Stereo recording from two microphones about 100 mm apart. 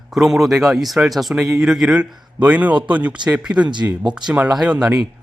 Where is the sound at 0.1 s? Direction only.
5° right (ahead or behind).